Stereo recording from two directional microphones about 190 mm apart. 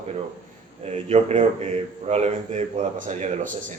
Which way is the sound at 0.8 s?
35° right (ahead or behind).